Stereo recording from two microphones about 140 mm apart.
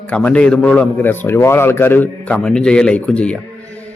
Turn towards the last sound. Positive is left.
turn(degrees=10)  # may be behind; listen again after turning